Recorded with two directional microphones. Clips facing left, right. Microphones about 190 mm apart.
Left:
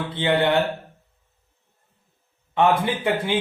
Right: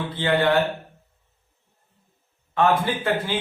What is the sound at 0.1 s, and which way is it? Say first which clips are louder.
Speech: left 1 dB; 20° left (ahead or behind).